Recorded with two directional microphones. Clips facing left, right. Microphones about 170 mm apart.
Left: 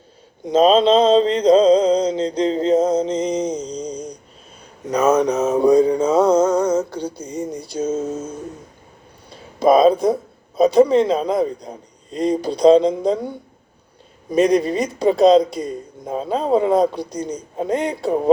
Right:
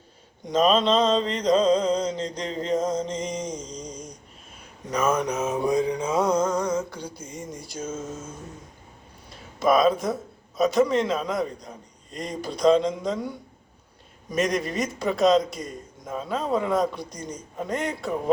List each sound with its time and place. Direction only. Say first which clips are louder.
0.5 s mantra: left 7 dB; 30° left (ahead or behind)
4.9 s a sound: left 8 dB; 30° left (ahead or behind)
5.4 s a sound: left 9 dB; 40° left (ahead or behind)
7.7 s mantra: left 11 dB; 30° left (ahead or behind)
9.6 s mantra: left 7 dB; 35° left (ahead or behind)
11.7 s speech: left 8 dB; 30° left (ahead or behind)
14.3 s mantra: left 9 dB; 35° left (ahead or behind)